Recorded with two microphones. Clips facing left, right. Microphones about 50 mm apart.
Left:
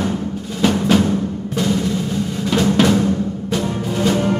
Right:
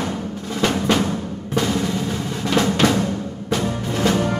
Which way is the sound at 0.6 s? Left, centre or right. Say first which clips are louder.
Left 4 dB; centre.